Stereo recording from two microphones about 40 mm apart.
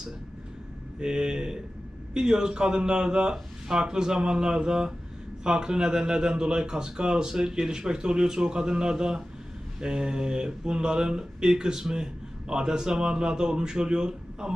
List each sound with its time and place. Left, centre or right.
0.9 s speech: right